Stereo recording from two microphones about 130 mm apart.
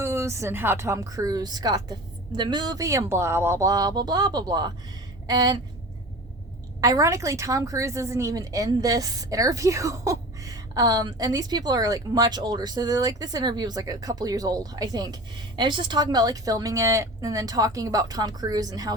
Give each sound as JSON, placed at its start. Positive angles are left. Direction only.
{"t": 0.0, "sound": "a woman's voice", "side_deg": -20}
{"t": 5.2, "sound": "a sound", "side_deg": -30}
{"t": 6.8, "sound": "a woman's voice", "side_deg": -25}